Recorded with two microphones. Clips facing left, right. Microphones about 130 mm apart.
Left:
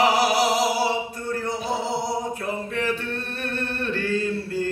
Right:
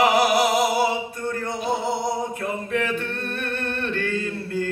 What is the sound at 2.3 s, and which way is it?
Male singing, 55° right (ahead or behind).